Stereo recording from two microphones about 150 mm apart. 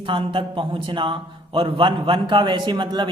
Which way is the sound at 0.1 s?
35° right (ahead or behind).